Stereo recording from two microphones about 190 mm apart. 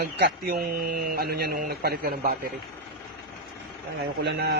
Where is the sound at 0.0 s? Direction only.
55° right (ahead or behind).